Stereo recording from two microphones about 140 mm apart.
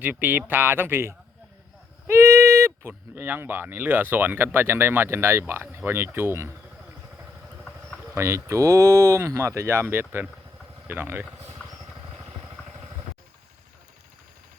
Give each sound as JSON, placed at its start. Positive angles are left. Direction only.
{"t": 0.0, "sound": "speech", "side_deg": -10}
{"t": 8.1, "sound": "speech", "side_deg": -20}